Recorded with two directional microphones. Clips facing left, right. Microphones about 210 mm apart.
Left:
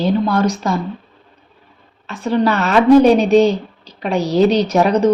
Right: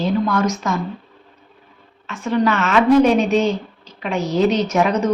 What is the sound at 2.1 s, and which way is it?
A woman's voice, 35° left (ahead or behind).